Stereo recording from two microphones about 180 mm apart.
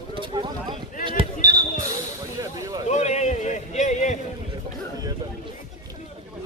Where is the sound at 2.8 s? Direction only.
40° left (ahead or behind).